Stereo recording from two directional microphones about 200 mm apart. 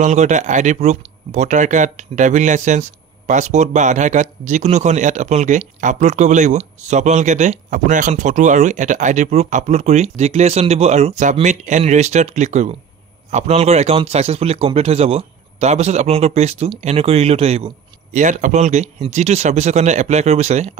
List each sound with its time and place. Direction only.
0.0 s speech: 35° right (ahead or behind)